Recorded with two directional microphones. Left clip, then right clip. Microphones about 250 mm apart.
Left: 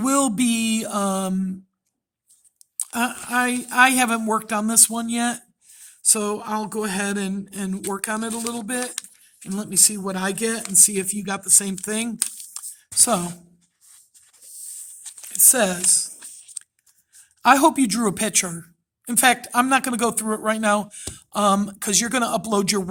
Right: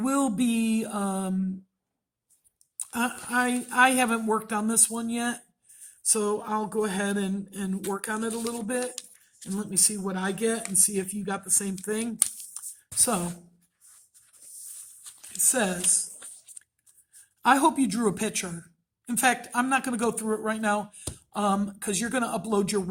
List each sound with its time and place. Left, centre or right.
0.0 s speech: left
2.8 s speech: left
12.5 s a sound: left
15.4 s speech: left
17.4 s speech: left